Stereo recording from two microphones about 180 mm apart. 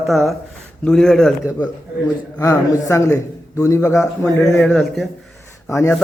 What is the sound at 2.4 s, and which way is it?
A man's voice, 15° left (ahead or behind).